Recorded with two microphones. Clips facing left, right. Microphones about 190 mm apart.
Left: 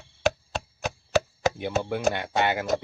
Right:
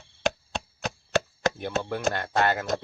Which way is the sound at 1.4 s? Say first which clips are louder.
Left 2 dB; 10° left (ahead or behind).